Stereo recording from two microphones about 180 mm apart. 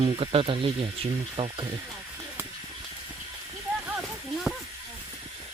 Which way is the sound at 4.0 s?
Centre (ahead or behind).